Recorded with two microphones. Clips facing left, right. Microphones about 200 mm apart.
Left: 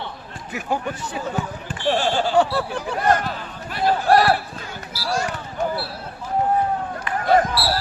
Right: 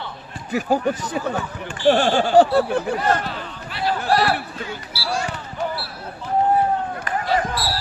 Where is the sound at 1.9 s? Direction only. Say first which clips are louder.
Right 4 dB; 50° right (ahead or behind).